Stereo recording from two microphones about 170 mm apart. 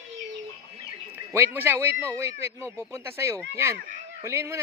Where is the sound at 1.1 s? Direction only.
15° right (ahead or behind).